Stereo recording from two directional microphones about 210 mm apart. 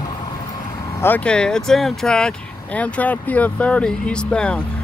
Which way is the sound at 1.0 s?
5° left (ahead or behind).